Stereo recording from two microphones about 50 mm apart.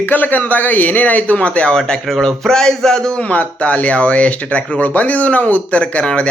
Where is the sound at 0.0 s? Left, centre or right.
Left.